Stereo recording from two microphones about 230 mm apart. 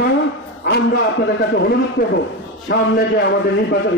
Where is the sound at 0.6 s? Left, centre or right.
Left.